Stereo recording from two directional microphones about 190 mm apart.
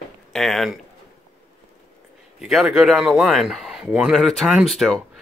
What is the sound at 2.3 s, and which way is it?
Speech, centre (ahead or behind).